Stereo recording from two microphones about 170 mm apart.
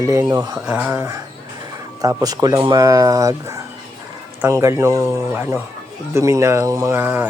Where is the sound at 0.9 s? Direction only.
20° right (ahead or behind).